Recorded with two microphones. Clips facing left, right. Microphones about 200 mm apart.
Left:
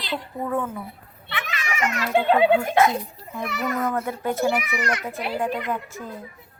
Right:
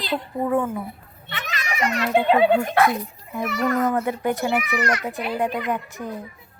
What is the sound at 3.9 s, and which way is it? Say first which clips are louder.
A woman's voice: right 3 dB; 15° right (ahead or behind).